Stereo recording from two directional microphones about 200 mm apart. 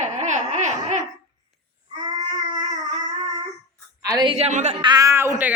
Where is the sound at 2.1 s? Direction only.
20° right (ahead or behind).